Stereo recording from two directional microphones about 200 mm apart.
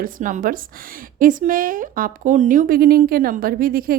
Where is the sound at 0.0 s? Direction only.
40° right (ahead or behind).